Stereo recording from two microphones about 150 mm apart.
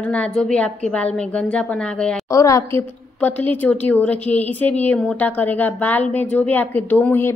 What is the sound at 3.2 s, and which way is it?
A woman's voice, 10° left (ahead or behind).